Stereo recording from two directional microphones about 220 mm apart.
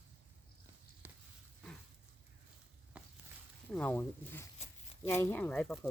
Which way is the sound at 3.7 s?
5° left (ahead or behind).